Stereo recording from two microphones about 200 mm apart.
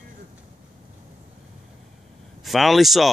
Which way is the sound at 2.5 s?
Centre (ahead or behind).